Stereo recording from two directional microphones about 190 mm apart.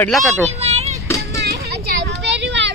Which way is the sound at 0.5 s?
35° right (ahead or behind).